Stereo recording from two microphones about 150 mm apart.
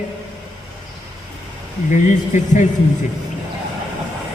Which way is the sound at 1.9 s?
55° left (ahead or behind).